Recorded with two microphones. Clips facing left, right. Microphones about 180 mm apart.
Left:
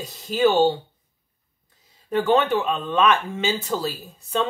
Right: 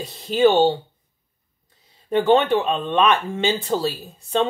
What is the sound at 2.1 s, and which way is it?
Speech, 25° right (ahead or behind).